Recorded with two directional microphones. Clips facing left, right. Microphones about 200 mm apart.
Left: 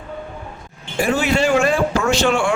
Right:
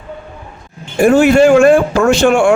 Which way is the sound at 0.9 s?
50° right (ahead or behind).